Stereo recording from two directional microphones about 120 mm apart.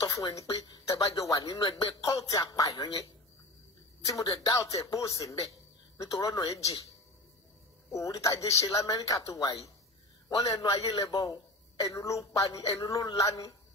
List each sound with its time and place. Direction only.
0.0 s speech: 25° left (ahead or behind)
1.7 s speech: 55° left (ahead or behind)
2.0 s speech: 25° left (ahead or behind)
10.6 s a man's voice: 30° left (ahead or behind)